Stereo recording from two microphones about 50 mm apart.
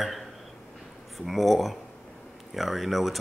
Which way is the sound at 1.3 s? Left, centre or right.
Centre.